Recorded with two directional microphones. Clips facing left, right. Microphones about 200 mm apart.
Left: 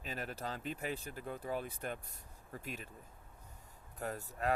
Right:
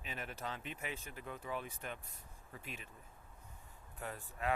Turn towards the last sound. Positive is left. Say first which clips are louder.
# left 3 dB
turn(degrees=40)  # may be behind; listen again after turning